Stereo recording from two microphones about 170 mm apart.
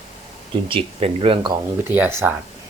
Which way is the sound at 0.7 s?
35° right (ahead or behind).